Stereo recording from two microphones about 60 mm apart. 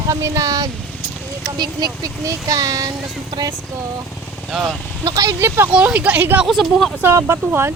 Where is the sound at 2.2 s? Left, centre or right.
Right.